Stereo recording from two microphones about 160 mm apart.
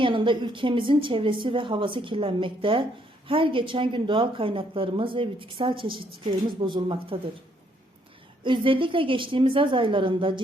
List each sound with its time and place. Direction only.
0.0 s a woman's voice: 30° right (ahead or behind)
8.4 s a woman's voice: 35° right (ahead or behind)